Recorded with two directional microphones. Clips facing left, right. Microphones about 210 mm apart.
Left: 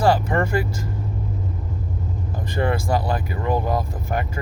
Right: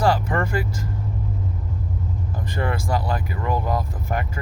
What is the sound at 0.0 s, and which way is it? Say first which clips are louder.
Speech: left 2 dB; 25° left (ahead or behind).